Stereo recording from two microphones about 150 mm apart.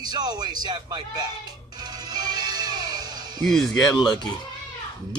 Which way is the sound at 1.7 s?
25° right (ahead or behind).